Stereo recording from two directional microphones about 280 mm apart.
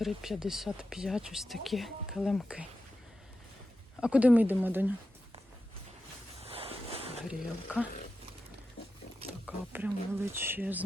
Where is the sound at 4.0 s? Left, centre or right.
Centre.